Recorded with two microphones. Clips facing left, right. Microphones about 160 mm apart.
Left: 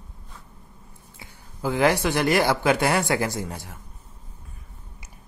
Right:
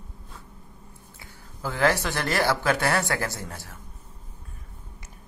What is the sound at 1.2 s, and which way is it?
Speech, 15° left (ahead or behind).